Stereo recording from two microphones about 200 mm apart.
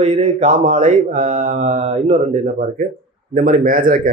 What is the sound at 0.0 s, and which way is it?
Mantra, 35° right (ahead or behind).